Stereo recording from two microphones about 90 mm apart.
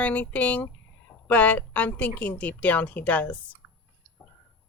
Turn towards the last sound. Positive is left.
turn(degrees=15)  # may be behind; listen again after turning